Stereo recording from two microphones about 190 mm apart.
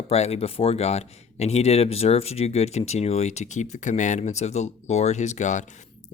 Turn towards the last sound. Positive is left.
turn(degrees=40)  # may be behind; listen again after turning